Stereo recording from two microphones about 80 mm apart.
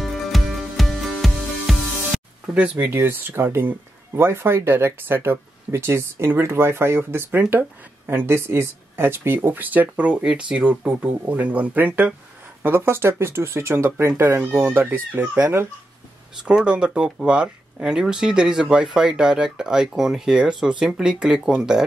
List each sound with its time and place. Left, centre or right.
0.0 s music: centre
2.5 s speech: centre
2.9 s speech: right
16.3 s speech: centre